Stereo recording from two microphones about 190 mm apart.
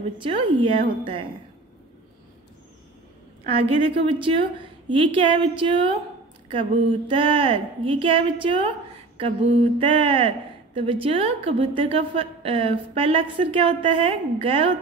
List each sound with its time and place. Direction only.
0.2 s a woman's voice: 25° right (ahead or behind)
3.4 s a woman's voice: 30° right (ahead or behind)
9.8 s a woman's voice: 30° right (ahead or behind)